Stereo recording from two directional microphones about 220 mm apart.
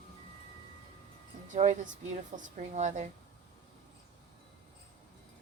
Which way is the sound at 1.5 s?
30° right (ahead or behind).